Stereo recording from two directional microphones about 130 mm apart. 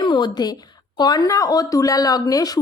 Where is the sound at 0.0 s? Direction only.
35° left (ahead or behind).